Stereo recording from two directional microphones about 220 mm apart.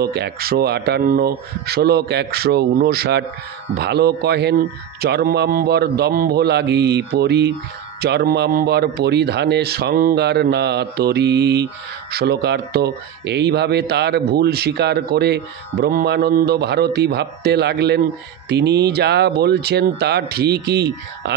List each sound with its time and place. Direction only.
0.0 s a man's voice: 45° right (ahead or behind)